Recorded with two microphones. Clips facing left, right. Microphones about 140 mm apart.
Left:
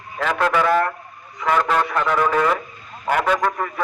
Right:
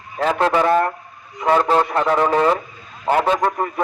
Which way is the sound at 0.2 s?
30° right (ahead or behind).